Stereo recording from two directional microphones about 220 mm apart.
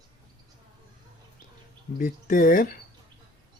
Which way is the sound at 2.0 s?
40° left (ahead or behind).